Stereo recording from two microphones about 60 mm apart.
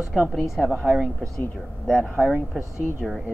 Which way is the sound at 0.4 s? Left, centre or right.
Centre.